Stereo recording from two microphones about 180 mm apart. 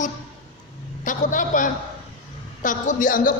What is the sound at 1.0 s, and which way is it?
A man's voice, 45° left (ahead or behind).